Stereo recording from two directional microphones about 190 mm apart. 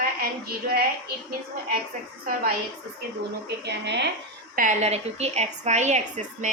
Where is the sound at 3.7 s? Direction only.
65° right (ahead or behind).